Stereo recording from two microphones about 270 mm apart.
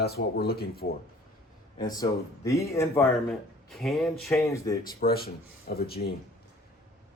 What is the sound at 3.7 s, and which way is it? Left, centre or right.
Speech, centre.